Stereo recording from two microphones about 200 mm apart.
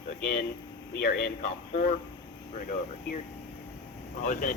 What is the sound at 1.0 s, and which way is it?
Speech, 50° left (ahead or behind).